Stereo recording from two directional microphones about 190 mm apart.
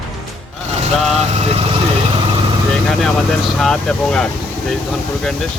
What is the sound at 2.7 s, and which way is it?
Vehicle, centre (ahead or behind).